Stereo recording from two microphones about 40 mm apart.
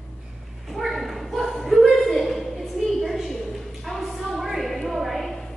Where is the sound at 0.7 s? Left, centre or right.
Centre.